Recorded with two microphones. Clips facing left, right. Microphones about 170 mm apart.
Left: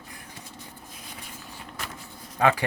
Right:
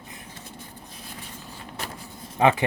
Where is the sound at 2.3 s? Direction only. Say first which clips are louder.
Right 2 dB; 20° right (ahead or behind).